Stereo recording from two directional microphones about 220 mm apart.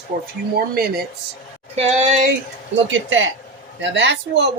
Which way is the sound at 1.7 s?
30° right (ahead or behind).